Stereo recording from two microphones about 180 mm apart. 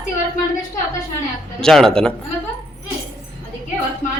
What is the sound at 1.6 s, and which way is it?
Speech, 5° left (ahead or behind).